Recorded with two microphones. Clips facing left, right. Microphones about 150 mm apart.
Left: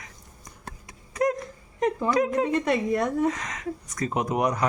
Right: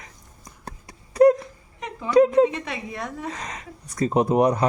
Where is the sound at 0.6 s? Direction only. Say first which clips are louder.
Right 3 dB; 35° right (ahead or behind).